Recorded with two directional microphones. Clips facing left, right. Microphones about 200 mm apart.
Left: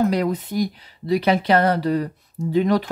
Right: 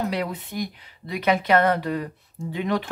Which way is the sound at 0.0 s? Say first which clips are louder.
Left 7 dB; 45° left (ahead or behind).